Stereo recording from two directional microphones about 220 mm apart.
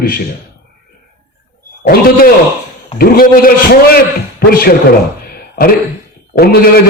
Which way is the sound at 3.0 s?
40° left (ahead or behind).